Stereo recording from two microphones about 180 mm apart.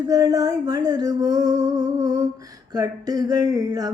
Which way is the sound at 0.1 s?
20° right (ahead or behind).